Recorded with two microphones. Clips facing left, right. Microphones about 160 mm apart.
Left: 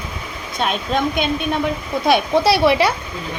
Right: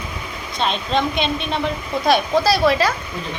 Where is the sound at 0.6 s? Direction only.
10° left (ahead or behind).